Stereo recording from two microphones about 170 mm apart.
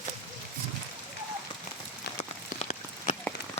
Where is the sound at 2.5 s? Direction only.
40° left (ahead or behind).